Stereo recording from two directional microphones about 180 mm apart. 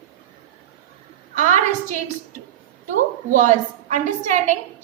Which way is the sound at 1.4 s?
45° right (ahead or behind).